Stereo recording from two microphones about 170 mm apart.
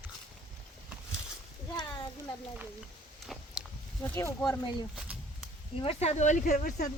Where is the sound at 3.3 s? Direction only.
Centre (ahead or behind).